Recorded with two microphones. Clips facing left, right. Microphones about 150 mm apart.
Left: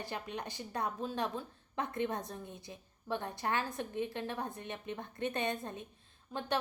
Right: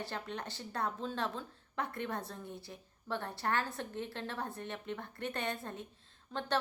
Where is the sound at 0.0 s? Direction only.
15° left (ahead or behind).